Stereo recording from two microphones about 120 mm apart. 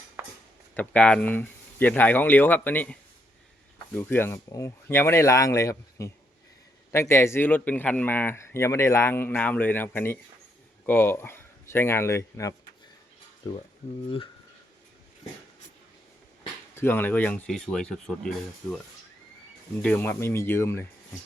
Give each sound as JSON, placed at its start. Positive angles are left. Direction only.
{"t": 0.2, "sound": "a sound", "side_deg": -15}
{"t": 0.7, "sound": "speech", "side_deg": 10}
{"t": 16.7, "sound": "speech", "side_deg": 15}
{"t": 19.8, "sound": "speech", "side_deg": 15}